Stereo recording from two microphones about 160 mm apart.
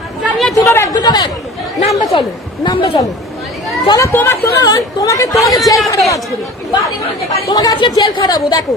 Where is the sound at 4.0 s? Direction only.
15° left (ahead or behind).